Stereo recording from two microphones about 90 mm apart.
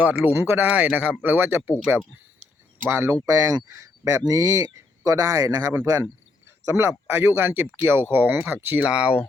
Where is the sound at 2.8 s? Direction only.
25° right (ahead or behind).